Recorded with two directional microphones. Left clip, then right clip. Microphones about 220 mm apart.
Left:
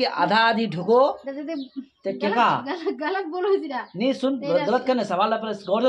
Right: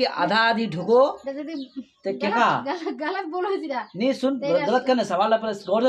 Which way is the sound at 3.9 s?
5° left (ahead or behind).